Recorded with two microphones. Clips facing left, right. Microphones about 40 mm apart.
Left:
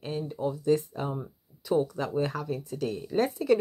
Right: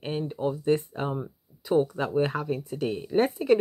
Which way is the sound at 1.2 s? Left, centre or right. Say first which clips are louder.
Right 4 dB; right.